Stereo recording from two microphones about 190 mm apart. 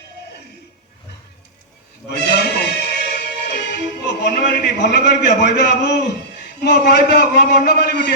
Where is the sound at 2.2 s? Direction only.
60° left (ahead or behind).